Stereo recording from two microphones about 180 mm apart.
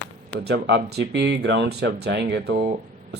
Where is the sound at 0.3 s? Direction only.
65° right (ahead or behind).